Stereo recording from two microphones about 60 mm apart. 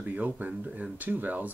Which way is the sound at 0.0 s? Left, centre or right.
Right.